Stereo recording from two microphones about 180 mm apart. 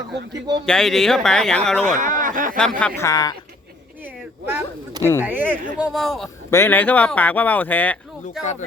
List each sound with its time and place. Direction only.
0.6 s speech: 5° left (ahead or behind)
1.9 s speech: 45° right (ahead or behind)
2.6 s speech: 5° left (ahead or behind)
3.0 s speech: 20° left (ahead or behind)
4.0 s a sound: 15° right (ahead or behind)
5.2 s speech: 10° right (ahead or behind)
6.5 s speech: 10° left (ahead or behind)